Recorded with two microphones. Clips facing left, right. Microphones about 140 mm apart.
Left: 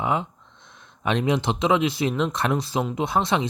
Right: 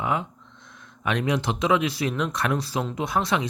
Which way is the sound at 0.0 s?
25° left (ahead or behind).